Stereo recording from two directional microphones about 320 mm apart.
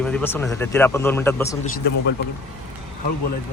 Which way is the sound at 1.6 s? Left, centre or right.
Left.